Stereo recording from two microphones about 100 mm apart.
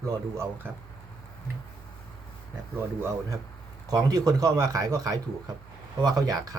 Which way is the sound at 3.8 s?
40° right (ahead or behind).